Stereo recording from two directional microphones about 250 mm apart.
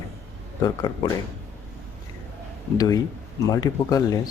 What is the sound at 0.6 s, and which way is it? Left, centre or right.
Speech, centre.